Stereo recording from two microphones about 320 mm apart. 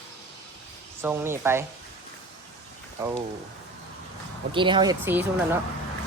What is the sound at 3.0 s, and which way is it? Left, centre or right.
Speech, centre.